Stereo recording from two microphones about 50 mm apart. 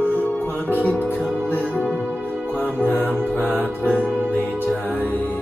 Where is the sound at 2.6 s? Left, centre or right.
Left.